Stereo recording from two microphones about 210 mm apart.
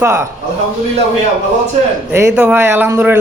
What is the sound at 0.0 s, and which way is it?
Speech, 15° right (ahead or behind).